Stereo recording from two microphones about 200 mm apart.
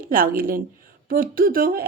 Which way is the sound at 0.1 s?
45° right (ahead or behind).